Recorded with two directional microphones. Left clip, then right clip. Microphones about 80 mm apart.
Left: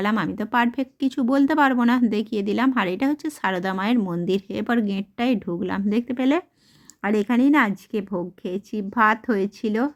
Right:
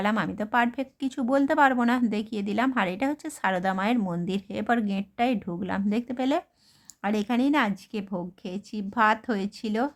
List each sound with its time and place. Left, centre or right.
0.0 s speech: left